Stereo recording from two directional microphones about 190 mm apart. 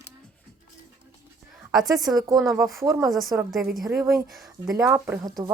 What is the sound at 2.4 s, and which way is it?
Speech, centre (ahead or behind).